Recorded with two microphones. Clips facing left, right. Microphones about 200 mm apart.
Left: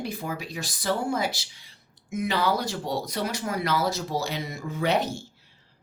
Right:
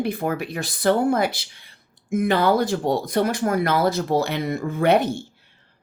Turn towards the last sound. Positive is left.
turn(degrees=-55)  # may be behind; listen again after turning